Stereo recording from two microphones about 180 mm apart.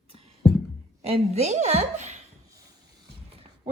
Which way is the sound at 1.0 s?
35° right (ahead or behind).